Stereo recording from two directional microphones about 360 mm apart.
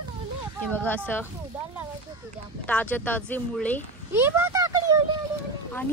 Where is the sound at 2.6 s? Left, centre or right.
Centre.